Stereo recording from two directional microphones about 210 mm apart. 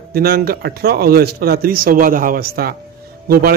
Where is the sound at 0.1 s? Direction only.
45° right (ahead or behind).